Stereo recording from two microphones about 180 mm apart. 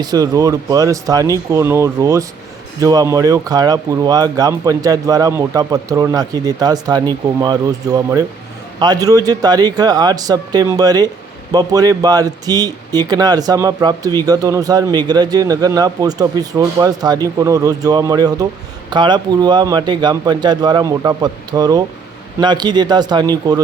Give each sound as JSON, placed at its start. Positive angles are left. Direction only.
{"t": 0.0, "sound": "speech", "side_deg": -20}